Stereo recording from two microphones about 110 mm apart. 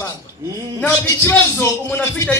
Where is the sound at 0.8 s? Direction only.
15° left (ahead or behind).